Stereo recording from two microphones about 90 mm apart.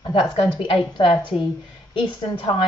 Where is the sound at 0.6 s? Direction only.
65° left (ahead or behind).